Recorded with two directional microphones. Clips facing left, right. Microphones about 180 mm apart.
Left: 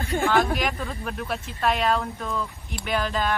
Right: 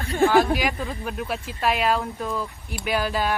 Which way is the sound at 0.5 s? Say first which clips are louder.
Right 2 dB; centre (ahead or behind).